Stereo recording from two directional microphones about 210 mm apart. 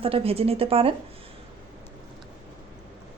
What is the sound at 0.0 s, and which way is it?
Speech, 25° right (ahead or behind).